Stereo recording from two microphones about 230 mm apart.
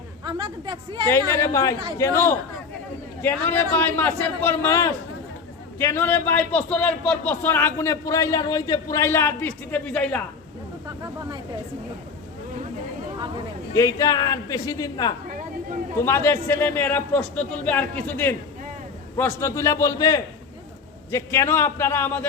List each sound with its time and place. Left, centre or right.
0.3 s chatter: right
1.4 s a man's voice: centre
13.7 s a man's voice: centre